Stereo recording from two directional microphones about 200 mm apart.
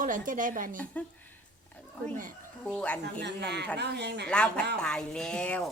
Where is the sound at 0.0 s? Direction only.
40° right (ahead or behind).